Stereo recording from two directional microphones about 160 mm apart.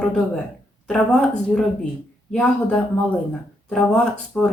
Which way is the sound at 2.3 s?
5° left (ahead or behind).